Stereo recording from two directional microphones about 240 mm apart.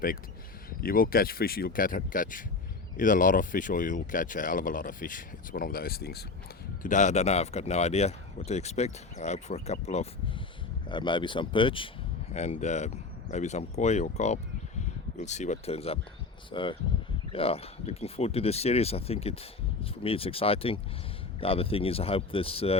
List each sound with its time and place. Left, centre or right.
0.8 s speech: left
6.8 s speech: left